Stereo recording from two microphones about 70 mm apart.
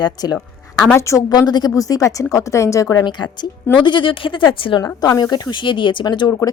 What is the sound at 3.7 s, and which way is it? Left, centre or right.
Speech, left.